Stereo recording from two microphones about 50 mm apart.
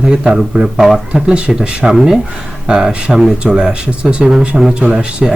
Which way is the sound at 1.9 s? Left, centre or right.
Centre.